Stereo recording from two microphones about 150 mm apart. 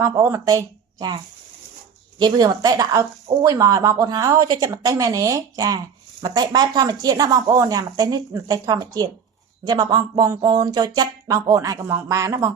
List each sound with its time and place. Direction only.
0.0 s speech: 20° right (ahead or behind)